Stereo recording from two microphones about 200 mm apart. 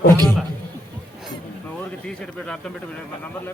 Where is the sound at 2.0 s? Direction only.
5° left (ahead or behind).